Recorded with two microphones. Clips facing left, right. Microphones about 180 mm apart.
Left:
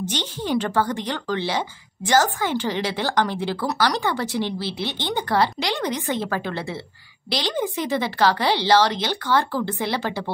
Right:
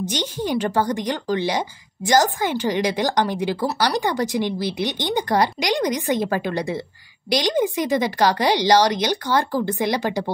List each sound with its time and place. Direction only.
0.0 s a woman's voice: 10° right (ahead or behind)